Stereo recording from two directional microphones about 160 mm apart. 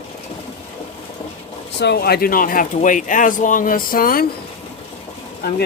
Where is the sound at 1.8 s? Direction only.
85° left; by 4.2 s 65° left (ahead or behind).